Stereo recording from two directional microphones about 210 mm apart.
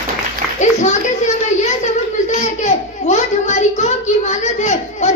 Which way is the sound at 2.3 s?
35° left (ahead or behind).